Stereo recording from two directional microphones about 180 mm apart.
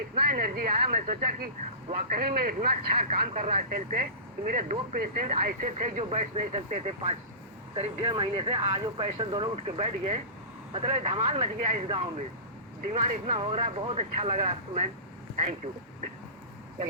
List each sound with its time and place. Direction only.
0.2 s speech: 55° right (ahead or behind); by 14.8 s 40° right (ahead or behind)